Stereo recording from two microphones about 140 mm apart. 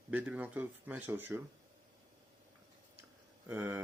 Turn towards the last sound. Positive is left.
turn(degrees=-15)  # may be behind; listen again after turning